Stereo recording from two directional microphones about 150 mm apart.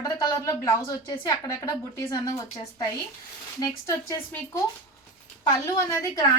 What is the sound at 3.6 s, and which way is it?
A woman's voice, 20° left (ahead or behind).